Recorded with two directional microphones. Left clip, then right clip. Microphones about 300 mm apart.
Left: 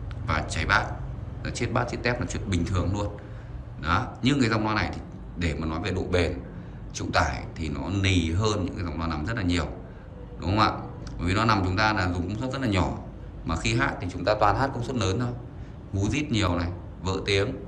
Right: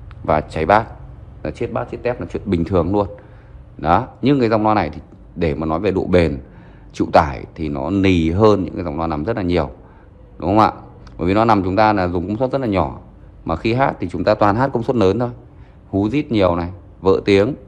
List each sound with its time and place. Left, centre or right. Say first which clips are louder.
0.3 s speech: right 10 dB; centre